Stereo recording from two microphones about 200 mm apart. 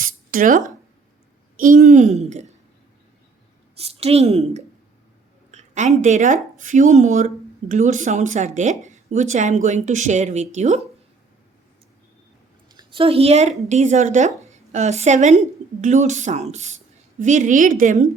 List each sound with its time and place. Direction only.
0.0 s a sound: 45° right (ahead or behind)
1.5 s a woman's voice: 45° right (ahead or behind)
3.8 s a woman's voice: 30° right (ahead or behind)
12.7 s a woman's voice: 25° right (ahead or behind)